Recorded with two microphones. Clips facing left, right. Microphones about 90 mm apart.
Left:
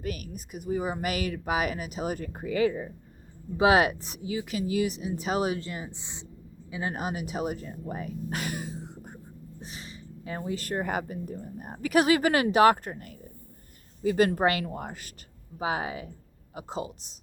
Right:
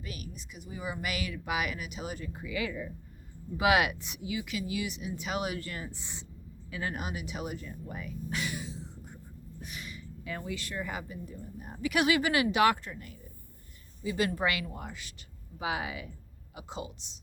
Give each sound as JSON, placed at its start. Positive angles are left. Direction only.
{"t": 0.0, "sound": "speech", "side_deg": 50}
{"t": 6.9, "sound": "speech", "side_deg": 35}
{"t": 9.6, "sound": "a sound", "side_deg": 30}
{"t": 10.6, "sound": "speech", "side_deg": 50}